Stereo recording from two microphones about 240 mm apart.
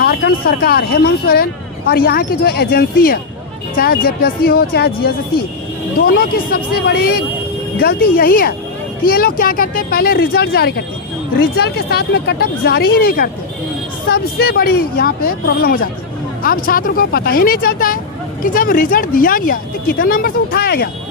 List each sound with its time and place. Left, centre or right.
0.0 s speech: left